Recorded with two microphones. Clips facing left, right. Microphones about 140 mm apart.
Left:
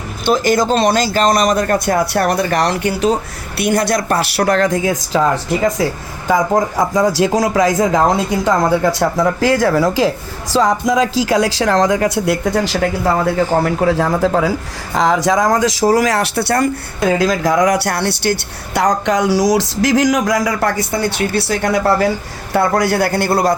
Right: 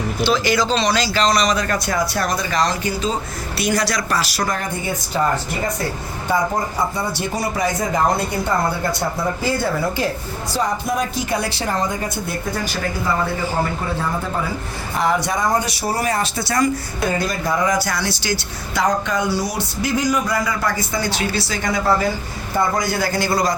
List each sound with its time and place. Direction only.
0.3 s speech: 50° left (ahead or behind); by 3.2 s 70° left (ahead or behind)
3.6 s speech: 55° left (ahead or behind); by 5.2 s 90° left
6.6 s speech: 90° left
13.3 s speech: 75° left (ahead or behind)
17.1 s speech: 90° left; by 23.6 s 60° left (ahead or behind)